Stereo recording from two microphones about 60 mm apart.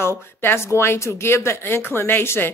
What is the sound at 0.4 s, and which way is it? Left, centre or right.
A woman's voice, left.